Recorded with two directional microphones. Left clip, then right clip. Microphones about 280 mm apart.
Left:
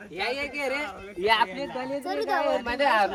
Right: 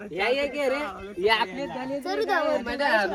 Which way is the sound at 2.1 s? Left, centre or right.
Right.